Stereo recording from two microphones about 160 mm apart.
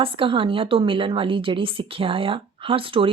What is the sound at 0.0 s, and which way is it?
A woman's voice, 35° right (ahead or behind).